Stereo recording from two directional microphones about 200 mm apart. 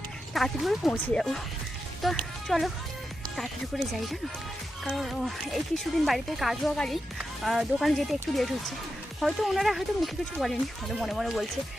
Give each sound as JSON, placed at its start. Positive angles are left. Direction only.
{"t": 0.3, "sound": "speech", "side_deg": 0}